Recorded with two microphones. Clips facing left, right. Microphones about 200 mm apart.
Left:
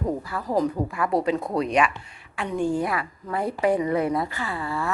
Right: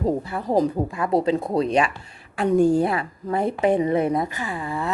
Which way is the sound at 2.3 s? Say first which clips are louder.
Right 7 dB; 40° right (ahead or behind).